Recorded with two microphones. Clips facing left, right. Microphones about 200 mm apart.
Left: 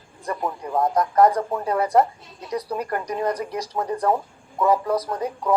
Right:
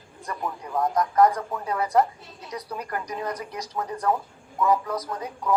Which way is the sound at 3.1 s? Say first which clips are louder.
Left 7 dB; 50° left (ahead or behind).